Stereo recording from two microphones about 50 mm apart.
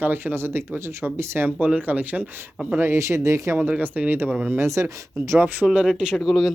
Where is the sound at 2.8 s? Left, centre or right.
Right.